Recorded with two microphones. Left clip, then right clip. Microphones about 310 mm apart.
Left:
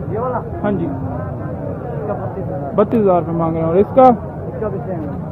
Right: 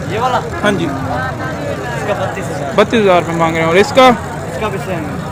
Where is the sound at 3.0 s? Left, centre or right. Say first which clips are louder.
Right 4 dB; right.